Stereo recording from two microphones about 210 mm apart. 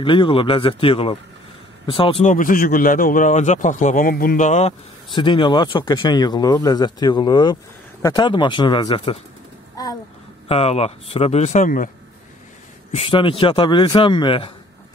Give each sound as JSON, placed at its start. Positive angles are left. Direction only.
{"t": 0.0, "sound": "speech", "side_deg": 25}
{"t": 2.3, "sound": "a man's voice", "side_deg": 40}
{"t": 5.1, "sound": "speech", "side_deg": 20}
{"t": 9.8, "sound": "a sound", "side_deg": 15}
{"t": 10.5, "sound": "a man's voice", "side_deg": 30}
{"t": 12.9, "sound": "speech", "side_deg": 25}